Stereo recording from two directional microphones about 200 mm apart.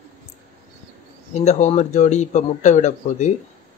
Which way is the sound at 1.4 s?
35° left (ahead or behind).